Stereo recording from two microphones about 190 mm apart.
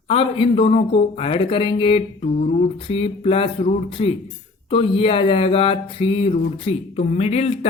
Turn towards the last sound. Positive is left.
turn(degrees=35)  # may be behind; listen again after turning